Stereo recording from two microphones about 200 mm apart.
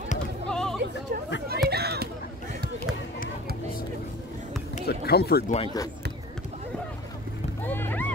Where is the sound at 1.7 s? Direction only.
55° right (ahead or behind).